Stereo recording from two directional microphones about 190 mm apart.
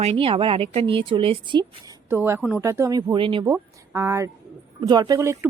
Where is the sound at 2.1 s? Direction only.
10° right (ahead or behind).